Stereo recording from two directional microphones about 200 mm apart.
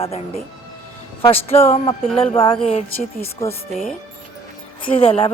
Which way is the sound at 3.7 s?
Centre (ahead or behind).